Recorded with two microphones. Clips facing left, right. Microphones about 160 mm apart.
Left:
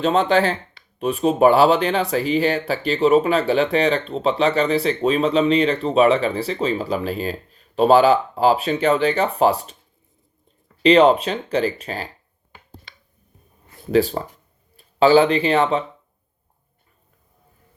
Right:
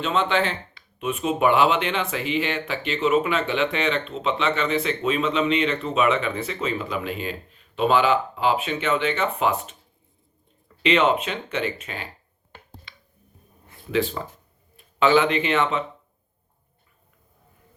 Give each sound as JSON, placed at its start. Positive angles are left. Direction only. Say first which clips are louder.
{"t": 0.0, "sound": "speech", "louder": "left 6 dB", "side_deg": 40}
{"t": 10.8, "sound": "speech", "louder": "left 7 dB", "side_deg": 35}
{"t": 13.9, "sound": "speech", "louder": "left 6 dB", "side_deg": 40}